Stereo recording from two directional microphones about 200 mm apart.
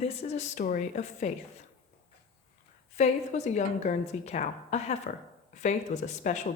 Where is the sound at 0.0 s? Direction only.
30° left (ahead or behind).